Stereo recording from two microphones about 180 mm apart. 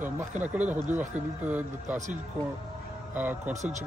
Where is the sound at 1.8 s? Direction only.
40° right (ahead or behind).